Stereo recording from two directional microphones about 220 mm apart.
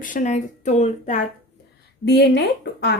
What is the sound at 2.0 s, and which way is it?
Speech, 50° left (ahead or behind).